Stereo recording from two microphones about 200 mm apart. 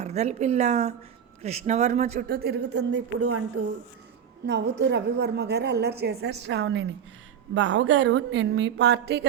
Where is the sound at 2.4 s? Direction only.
55° right (ahead or behind).